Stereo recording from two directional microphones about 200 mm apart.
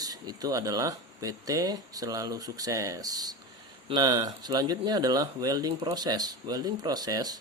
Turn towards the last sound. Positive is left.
turn(degrees=-20)  # may be behind; listen again after turning